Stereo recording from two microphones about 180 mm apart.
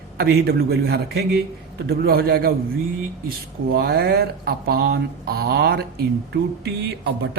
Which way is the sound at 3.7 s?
60° right (ahead or behind).